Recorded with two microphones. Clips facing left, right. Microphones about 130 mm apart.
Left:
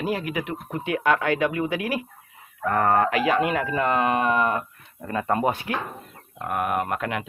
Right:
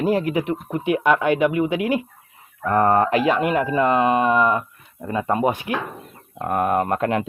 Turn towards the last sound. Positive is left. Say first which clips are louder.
# right 6 dB
turn(degrees=-30)  # may be behind; listen again after turning